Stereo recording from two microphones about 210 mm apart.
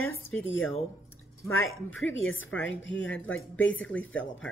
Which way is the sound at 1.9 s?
65° left (ahead or behind).